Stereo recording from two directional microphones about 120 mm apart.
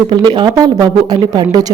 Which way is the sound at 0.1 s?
40° right (ahead or behind).